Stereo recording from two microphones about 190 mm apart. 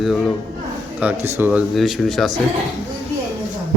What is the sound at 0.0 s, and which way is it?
A man's voice, centre (ahead or behind).